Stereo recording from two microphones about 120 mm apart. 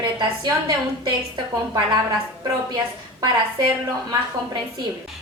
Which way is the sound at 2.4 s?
35° right (ahead or behind).